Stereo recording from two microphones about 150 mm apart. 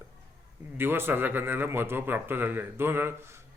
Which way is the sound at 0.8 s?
15° right (ahead or behind).